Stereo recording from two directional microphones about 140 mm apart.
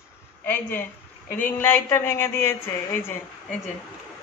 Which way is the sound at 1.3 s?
15° left (ahead or behind).